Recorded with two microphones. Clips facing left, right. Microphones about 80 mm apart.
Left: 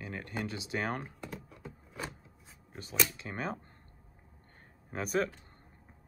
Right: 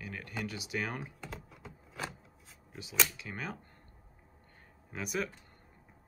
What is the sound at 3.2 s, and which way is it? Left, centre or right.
Speech, left.